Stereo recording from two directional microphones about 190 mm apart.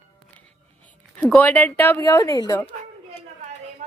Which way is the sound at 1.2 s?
10° left (ahead or behind).